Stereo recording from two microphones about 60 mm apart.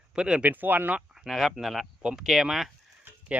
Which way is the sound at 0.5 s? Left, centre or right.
Right.